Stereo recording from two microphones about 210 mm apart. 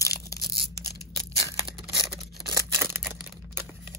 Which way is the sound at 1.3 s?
25° right (ahead or behind).